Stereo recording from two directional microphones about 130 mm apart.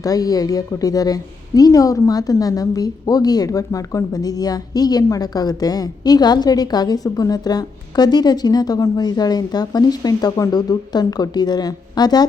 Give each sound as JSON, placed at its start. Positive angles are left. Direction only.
{"t": 0.0, "sound": "a woman's voice", "side_deg": 30}